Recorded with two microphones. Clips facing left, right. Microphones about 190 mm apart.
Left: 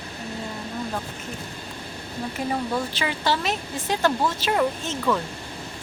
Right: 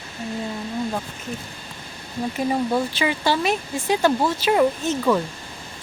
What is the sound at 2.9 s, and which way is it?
Speech, 10° right (ahead or behind).